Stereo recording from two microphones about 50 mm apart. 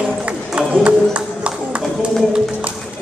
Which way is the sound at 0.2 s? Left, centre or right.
Right.